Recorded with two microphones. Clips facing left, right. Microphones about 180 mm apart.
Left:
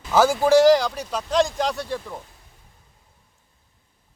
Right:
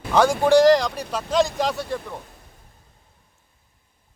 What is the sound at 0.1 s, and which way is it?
Speech, 5° left (ahead or behind).